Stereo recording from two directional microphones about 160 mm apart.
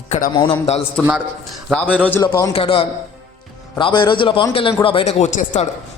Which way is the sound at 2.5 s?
35° left (ahead or behind).